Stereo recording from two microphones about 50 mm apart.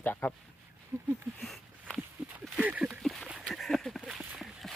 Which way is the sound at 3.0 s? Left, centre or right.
Centre.